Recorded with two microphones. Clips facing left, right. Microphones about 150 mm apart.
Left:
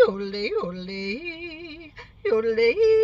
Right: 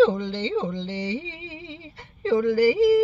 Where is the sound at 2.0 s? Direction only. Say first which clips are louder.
Even; 25° right (ahead or behind).